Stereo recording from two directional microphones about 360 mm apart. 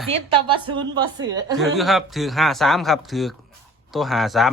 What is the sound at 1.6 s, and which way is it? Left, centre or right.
Speech, centre.